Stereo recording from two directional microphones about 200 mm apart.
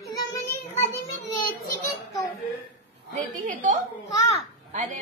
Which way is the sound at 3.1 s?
40° right (ahead or behind).